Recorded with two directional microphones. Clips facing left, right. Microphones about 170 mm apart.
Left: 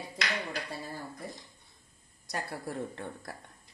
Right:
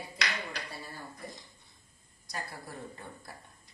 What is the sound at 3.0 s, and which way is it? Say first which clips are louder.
Speech: left 6 dB; 70° left (ahead or behind).